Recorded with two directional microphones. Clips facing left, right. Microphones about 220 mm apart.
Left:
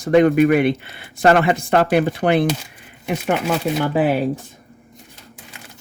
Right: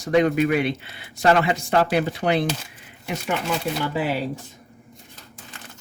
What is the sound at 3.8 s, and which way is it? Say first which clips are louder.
Speech: left 7 dB; 55° left (ahead or behind).